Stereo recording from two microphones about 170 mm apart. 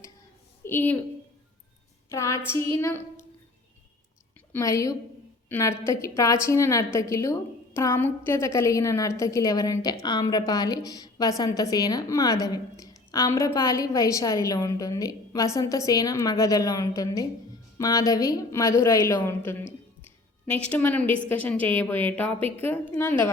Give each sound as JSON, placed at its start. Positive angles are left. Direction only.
{"t": 0.6, "sound": "a woman's voice", "side_deg": 10}
{"t": 2.0, "sound": "a woman's voice", "side_deg": 15}
{"t": 4.5, "sound": "a woman's voice", "side_deg": 20}